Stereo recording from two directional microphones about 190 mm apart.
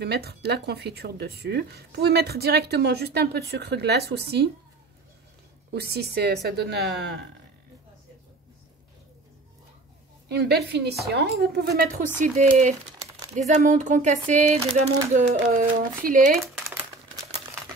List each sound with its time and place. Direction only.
0.0 s speech: 60° right (ahead or behind)
5.7 s speech: 55° right (ahead or behind)
10.2 s speech: 60° right (ahead or behind); by 12.7 s 40° right (ahead or behind)
13.5 s a sound: 40° right (ahead or behind)
15.1 s speech: 45° right (ahead or behind)
16.6 s crumpling: 15° right (ahead or behind)